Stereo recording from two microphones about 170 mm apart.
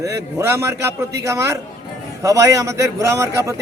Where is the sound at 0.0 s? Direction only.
15° right (ahead or behind).